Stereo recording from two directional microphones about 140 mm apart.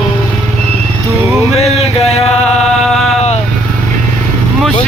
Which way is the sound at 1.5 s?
50° left (ahead or behind).